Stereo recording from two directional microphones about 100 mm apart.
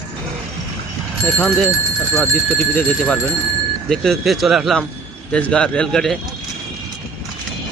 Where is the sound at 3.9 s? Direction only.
5° left (ahead or behind).